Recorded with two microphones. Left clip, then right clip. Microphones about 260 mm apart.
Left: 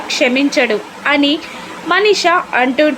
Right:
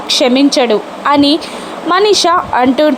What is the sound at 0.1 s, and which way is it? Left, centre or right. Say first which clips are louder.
A woman's voice: right 4 dB; centre.